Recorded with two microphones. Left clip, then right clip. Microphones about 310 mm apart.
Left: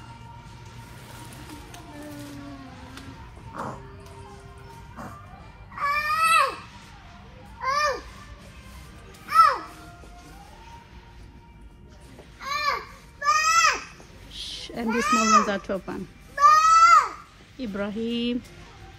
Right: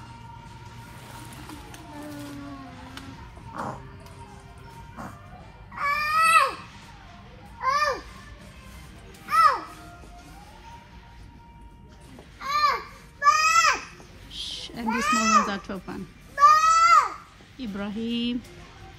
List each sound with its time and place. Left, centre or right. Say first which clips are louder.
5.8 s baby cry: right 1 dB; right
7.6 s babbling: right 1 dB; right
9.3 s music: left 1 dB; right
12.4 s a sound: right 3 dB; right
14.5 s a sound: left 2 dB; centre
14.9 s babbling: even; right
15.4 s speech: left 4 dB; centre
16.3 s a sound: left 1 dB; right
17.6 s speech: left 4 dB; centre